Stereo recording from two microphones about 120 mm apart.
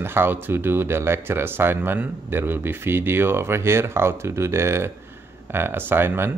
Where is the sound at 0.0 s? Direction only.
20° right (ahead or behind).